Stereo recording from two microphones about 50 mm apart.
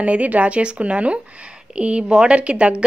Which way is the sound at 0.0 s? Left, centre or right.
Right.